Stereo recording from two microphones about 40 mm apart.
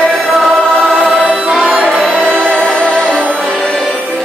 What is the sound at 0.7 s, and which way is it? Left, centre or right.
Music, centre.